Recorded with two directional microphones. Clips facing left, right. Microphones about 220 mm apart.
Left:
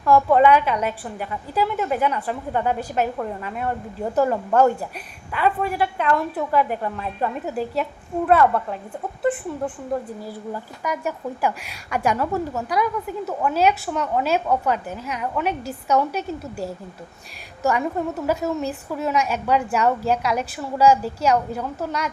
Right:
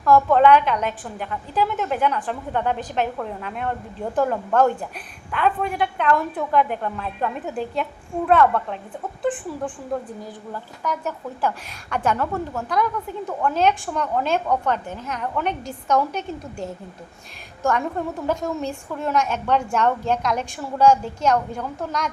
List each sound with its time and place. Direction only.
0.0 s a woman's voice: 10° left (ahead or behind)